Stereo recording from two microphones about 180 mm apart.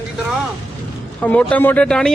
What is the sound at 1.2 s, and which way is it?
Speech, 5° left (ahead or behind).